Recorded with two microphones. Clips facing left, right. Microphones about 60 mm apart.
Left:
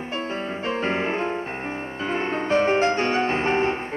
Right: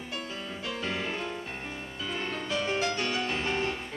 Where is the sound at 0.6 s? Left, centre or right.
Left.